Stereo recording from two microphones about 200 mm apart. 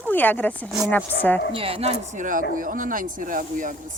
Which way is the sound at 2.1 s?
40° right (ahead or behind).